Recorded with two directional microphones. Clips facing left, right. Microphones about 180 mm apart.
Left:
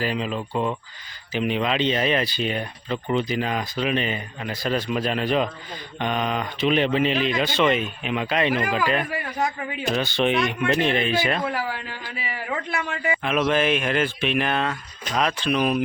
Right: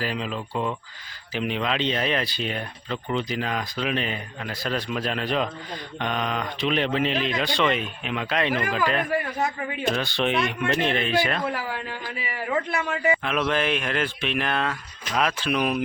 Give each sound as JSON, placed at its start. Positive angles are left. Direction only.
{"t": 0.0, "sound": "speech", "side_deg": 0}
{"t": 13.2, "sound": "speech", "side_deg": 5}